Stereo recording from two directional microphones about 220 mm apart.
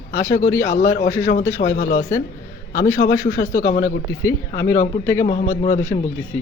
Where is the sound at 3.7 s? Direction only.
45° left (ahead or behind).